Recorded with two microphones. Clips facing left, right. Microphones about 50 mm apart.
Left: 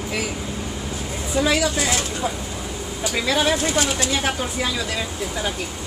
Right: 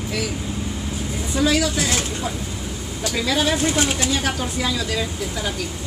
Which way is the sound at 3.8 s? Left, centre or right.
Right.